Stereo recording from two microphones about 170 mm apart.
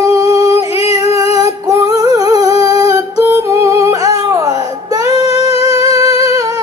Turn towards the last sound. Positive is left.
turn(degrees=-20)  # may be behind; listen again after turning